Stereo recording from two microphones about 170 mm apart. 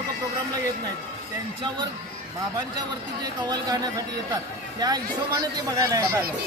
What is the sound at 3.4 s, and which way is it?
Speech, 25° right (ahead or behind).